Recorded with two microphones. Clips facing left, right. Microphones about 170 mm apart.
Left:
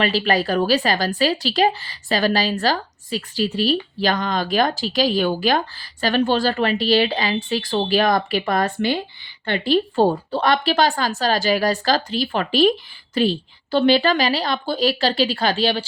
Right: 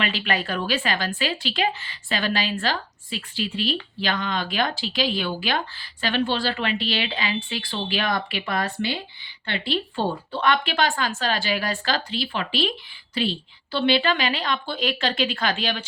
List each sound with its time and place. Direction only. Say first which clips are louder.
0.0 s a woman's voice: left 7 dB; 40° left (ahead or behind)